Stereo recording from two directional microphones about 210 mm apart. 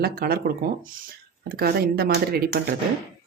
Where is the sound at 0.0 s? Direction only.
45° right (ahead or behind).